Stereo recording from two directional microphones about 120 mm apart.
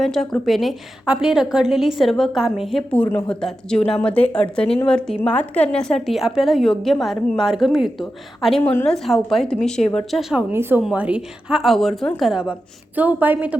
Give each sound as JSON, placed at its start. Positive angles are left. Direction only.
{"t": 0.0, "sound": "a woman's voice", "side_deg": 0}
{"t": 2.9, "sound": "a woman's voice", "side_deg": 15}
{"t": 10.5, "sound": "a woman's voice", "side_deg": -20}